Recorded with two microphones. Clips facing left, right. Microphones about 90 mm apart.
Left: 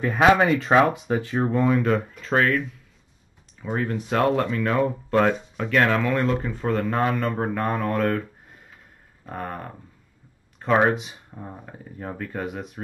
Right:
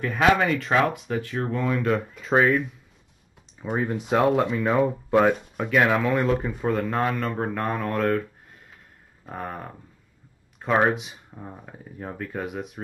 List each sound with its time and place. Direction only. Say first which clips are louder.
0.0 s speech: left 3 dB; 20° left (ahead or behind)
1.8 s speech: left 2 dB; centre (ahead or behind)
3.6 s speech: even; 10° right (ahead or behind)